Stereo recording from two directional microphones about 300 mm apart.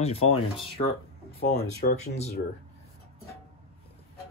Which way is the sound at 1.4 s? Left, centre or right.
Left.